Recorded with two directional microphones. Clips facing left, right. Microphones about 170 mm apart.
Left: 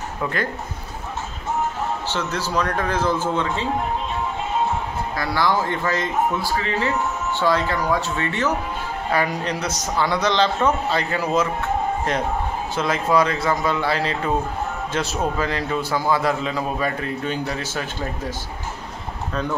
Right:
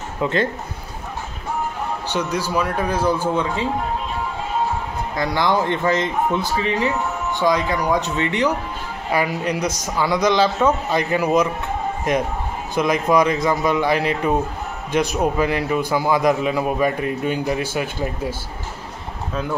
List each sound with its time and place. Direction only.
0.2 s a man's voice: 25° right (ahead or behind)
2.0 s a man's voice: 15° right (ahead or behind)
5.1 s a man's voice: 20° right (ahead or behind)